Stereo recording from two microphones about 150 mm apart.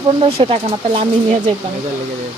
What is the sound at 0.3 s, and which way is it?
Speech, 40° right (ahead or behind).